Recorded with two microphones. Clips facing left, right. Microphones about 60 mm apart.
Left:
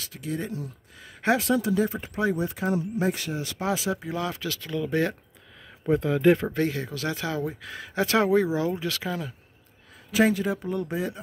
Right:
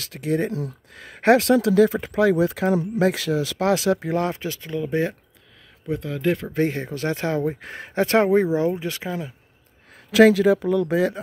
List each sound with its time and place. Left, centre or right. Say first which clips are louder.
0.0 s speech: right 8 dB; right
4.3 s speech: right 3 dB; right
6.0 s speech: left 3 dB; centre
6.6 s speech: right 4 dB; right
10.1 s speech: right 9 dB; right